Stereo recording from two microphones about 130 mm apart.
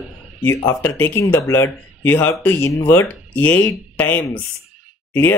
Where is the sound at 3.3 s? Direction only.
10° left (ahead or behind).